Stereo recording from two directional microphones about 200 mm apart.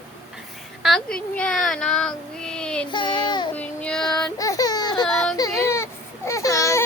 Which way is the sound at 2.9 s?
20° left (ahead or behind).